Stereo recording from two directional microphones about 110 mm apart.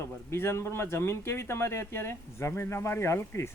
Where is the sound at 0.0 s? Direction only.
25° left (ahead or behind).